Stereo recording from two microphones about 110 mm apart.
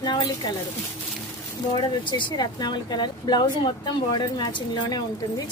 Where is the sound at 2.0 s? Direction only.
45° left (ahead or behind).